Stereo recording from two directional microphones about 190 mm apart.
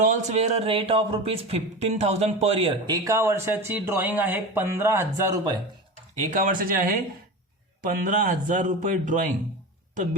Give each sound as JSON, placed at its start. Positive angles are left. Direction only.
{"t": 0.0, "sound": "speech", "side_deg": -40}
{"t": 6.4, "sound": "a man's voice", "side_deg": -45}